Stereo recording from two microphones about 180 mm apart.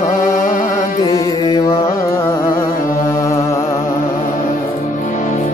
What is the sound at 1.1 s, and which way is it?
Music, 20° left (ahead or behind).